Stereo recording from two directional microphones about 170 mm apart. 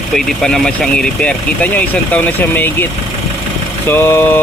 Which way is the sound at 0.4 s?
5° left (ahead or behind).